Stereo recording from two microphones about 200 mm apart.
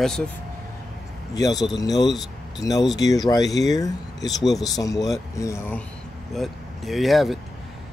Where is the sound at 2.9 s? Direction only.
20° left (ahead or behind).